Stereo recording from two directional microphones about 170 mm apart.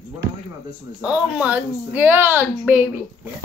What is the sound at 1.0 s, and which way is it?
A woman's voice, 5° right (ahead or behind).